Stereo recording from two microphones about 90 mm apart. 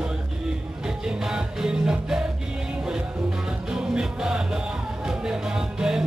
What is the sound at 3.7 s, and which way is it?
Music, 10° right (ahead or behind).